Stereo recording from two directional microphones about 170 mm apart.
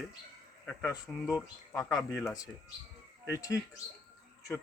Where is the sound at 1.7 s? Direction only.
20° left (ahead or behind).